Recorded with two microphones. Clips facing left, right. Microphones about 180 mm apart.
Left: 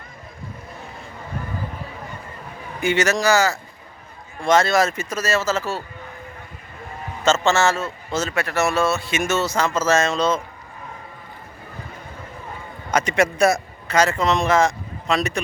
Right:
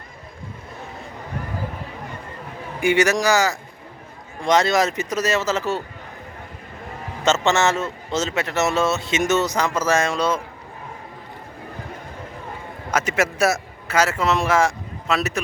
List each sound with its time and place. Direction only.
2.8 s a man's voice: 15° right (ahead or behind)
7.3 s a man's voice: 20° right (ahead or behind)
12.9 s a man's voice: 5° right (ahead or behind)